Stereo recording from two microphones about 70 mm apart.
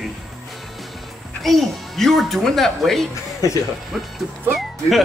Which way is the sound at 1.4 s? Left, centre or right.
Centre.